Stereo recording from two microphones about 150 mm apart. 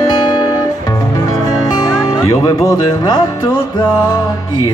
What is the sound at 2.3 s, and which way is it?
Speech, 20° left (ahead or behind).